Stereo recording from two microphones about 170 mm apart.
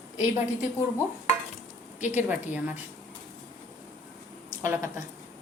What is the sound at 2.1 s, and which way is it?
Speech, 10° right (ahead or behind).